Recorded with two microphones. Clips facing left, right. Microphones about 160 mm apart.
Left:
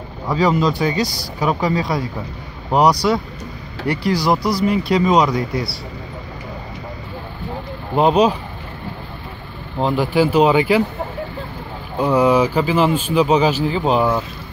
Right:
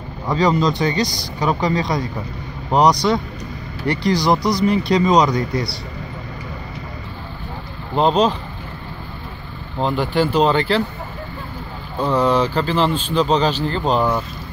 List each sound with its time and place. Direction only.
0.3 s speech: 5° left (ahead or behind)
7.9 s speech: 5° left (ahead or behind)
9.8 s speech: 5° left (ahead or behind)
12.0 s speech: 10° left (ahead or behind)